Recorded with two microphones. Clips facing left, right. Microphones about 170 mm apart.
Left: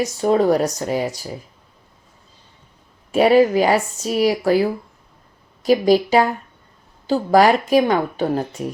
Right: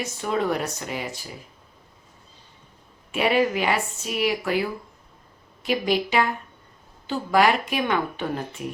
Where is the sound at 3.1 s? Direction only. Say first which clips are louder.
Left 8 dB; 40° left (ahead or behind).